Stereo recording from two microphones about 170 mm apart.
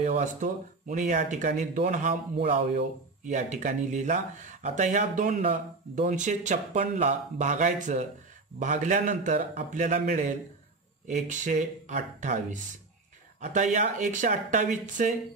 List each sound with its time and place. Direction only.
0.1 s speech: 50° right (ahead or behind)